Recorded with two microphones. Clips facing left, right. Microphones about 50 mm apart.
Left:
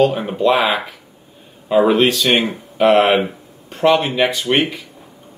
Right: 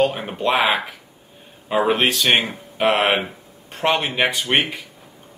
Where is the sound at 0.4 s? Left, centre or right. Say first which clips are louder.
Left 4 dB; centre.